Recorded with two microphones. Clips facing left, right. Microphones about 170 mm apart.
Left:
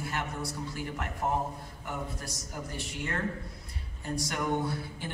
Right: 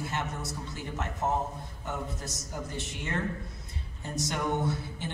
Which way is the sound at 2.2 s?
20° right (ahead or behind).